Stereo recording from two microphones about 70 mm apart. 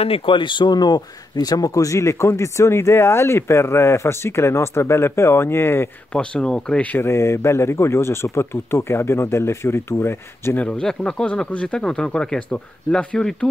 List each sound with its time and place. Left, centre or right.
0.5 s speech: left
6.1 s speech: centre
7.0 s speech: left
10.6 s speech: centre